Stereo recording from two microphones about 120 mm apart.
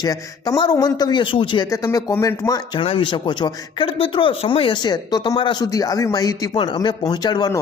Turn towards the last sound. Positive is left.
turn(degrees=35)  # may be behind; listen again after turning